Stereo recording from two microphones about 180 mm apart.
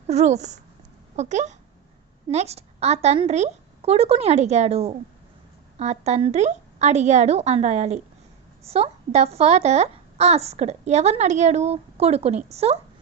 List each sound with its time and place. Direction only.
0.1 s a woman's voice: 40° right (ahead or behind)